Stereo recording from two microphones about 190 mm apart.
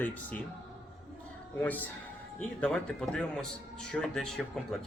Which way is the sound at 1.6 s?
10° left (ahead or behind).